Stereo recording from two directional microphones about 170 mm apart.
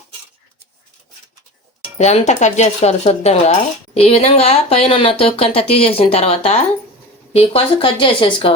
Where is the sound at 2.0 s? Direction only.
40° left (ahead or behind).